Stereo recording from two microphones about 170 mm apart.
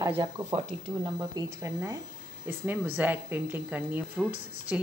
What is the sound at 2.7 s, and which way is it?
Speech, 10° right (ahead or behind).